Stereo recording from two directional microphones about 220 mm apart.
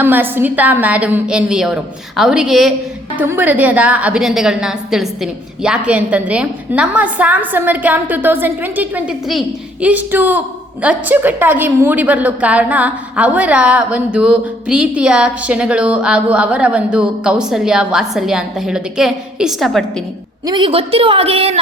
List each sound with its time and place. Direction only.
0.0 s a woman's voice: 10° right (ahead or behind)
20.5 s a woman's voice: 25° right (ahead or behind)